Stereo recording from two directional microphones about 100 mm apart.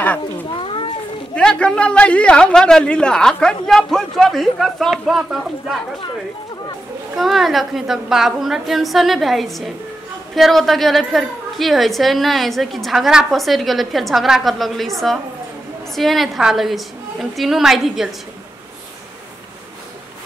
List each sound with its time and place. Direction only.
0.6 s children playing: 60° left (ahead or behind)
1.3 s a man's voice: 10° left (ahead or behind)
7.2 s a woman's voice: centre (ahead or behind)